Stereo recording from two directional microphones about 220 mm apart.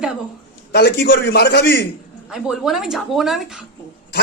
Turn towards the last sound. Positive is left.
turn(degrees=0)  # may be behind; listen again after turning